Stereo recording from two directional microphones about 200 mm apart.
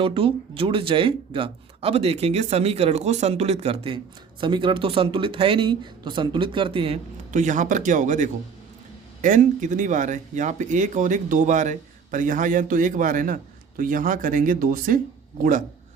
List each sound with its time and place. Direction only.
0.0 s a man's voice: 25° right (ahead or behind)